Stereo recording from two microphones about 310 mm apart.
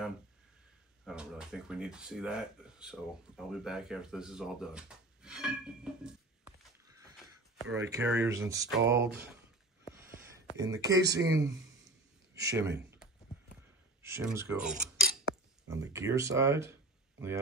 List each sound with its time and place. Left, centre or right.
1.0 s speech: centre
6.4 s a sound: centre
7.8 s speech: centre
14.6 s cutlery: right
15.7 s speech: centre